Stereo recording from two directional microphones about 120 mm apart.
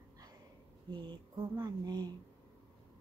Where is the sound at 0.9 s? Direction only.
40° right (ahead or behind).